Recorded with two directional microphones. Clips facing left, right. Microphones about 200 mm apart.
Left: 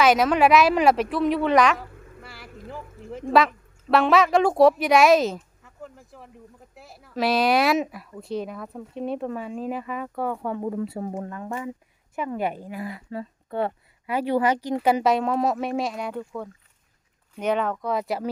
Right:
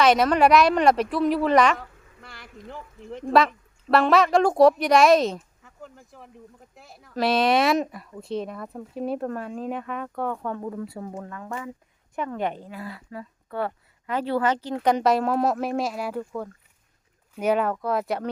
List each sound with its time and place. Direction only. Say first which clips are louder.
0.0 s a woman's voice: even; centre (ahead or behind)
10.6 s speech: left 4 dB; 25° left (ahead or behind)
12.1 s a woman's voice: left 1 dB; 5° left (ahead or behind)
13.1 s speech: left 4 dB; 25° left (ahead or behind)
14.1 s a woman's voice: left 2 dB; 10° left (ahead or behind)